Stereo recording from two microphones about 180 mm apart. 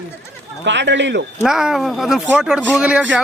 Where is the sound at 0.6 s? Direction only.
80° right.